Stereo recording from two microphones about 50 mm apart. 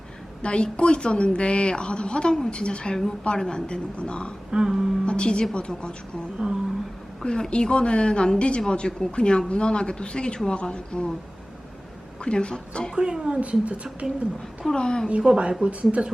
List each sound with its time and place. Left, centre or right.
0.4 s a woman's voice: centre
4.5 s a woman's voice: centre
5.0 s a woman's voice: centre
7.2 s a woman's voice: centre
12.2 s a woman's voice: centre
13.0 s a woman's voice: centre
14.0 s a woman's voice: centre
14.8 s a woman's voice: centre
15.0 s a woman's voice: centre